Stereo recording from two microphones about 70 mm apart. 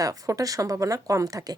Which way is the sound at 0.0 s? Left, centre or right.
Right.